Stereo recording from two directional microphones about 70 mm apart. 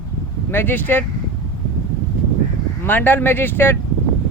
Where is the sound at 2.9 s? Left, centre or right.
Left.